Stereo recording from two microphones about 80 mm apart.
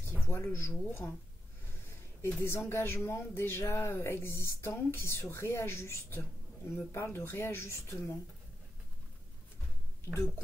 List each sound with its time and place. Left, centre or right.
0.3 s speech: left
2.2 s speech: left